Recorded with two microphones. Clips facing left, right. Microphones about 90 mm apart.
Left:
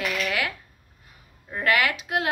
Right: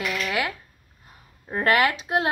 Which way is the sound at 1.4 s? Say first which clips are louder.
Right 3 dB; 35° right (ahead or behind).